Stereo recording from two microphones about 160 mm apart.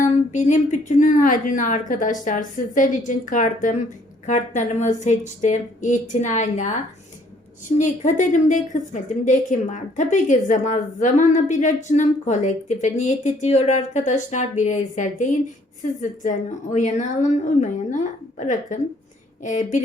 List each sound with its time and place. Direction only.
0.0 s a woman's voice: 50° left (ahead or behind)
7.8 s a woman's voice: 50° left (ahead or behind)